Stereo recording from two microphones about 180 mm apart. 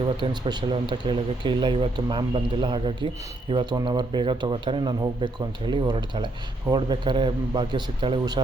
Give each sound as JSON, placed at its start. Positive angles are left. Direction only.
{"t": 0.2, "sound": "speech", "side_deg": -25}